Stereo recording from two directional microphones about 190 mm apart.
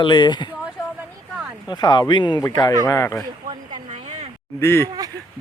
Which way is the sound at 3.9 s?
35° right (ahead or behind).